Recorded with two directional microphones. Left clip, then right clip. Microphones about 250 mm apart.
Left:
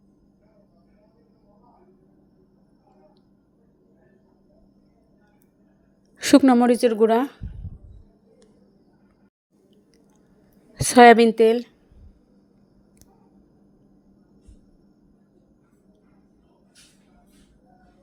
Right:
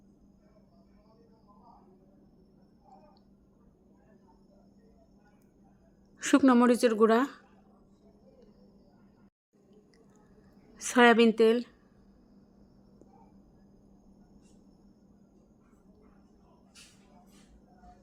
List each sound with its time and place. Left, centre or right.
6.1 s a woman's voice: centre
10.8 s a sound: left
11.3 s speech: centre